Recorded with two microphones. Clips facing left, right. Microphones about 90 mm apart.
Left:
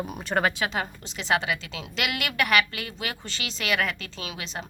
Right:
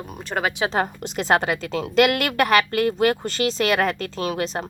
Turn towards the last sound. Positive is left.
turn(degrees=-45)  # may be behind; listen again after turning